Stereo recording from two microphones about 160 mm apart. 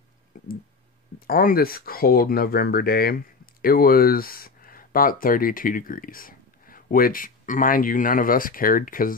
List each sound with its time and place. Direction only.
0.3 s clicking: 55° left (ahead or behind)
1.2 s speech: 65° left (ahead or behind)